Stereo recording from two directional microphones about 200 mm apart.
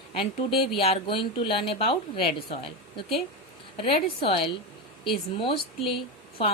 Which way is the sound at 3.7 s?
25° left (ahead or behind).